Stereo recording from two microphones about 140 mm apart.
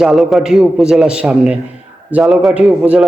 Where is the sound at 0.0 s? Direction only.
Centre (ahead or behind).